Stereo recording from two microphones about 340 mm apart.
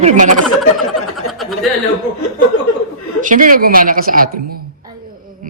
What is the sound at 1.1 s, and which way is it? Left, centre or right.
Speech, centre.